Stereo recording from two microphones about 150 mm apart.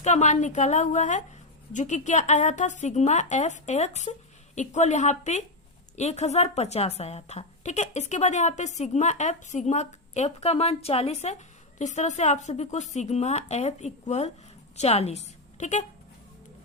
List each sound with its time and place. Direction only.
0.0 s a woman's voice: 50° left (ahead or behind)